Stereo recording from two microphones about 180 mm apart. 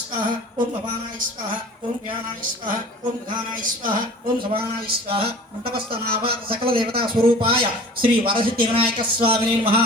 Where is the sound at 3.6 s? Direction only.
50° right (ahead or behind).